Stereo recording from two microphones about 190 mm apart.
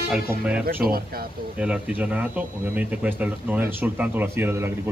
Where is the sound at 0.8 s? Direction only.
50° right (ahead or behind).